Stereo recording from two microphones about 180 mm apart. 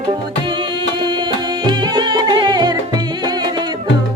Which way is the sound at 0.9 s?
25° right (ahead or behind).